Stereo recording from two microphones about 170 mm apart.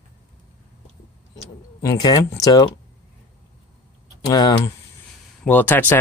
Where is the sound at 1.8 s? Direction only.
20° left (ahead or behind).